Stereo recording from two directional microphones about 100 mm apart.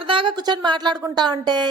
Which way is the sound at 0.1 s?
55° right (ahead or behind).